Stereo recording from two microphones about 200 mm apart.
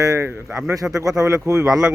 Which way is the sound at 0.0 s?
15° right (ahead or behind).